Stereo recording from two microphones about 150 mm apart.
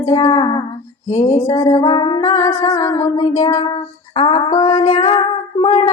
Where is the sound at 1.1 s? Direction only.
55° left (ahead or behind).